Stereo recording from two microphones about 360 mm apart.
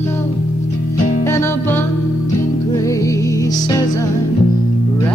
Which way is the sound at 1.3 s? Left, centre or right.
Centre.